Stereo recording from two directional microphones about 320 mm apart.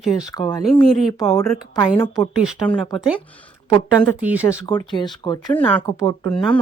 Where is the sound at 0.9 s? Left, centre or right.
Centre.